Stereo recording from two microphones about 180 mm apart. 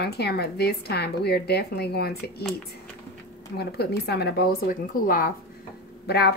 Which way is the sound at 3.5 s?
65° left (ahead or behind).